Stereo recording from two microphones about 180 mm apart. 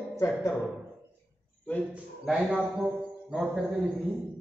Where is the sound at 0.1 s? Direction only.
15° left (ahead or behind).